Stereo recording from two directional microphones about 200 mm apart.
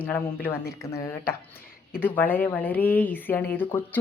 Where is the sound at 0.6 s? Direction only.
50° left (ahead or behind).